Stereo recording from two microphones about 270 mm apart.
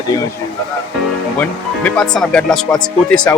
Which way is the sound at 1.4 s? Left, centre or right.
Centre.